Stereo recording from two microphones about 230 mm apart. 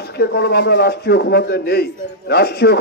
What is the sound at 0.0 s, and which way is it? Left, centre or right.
Speech, left.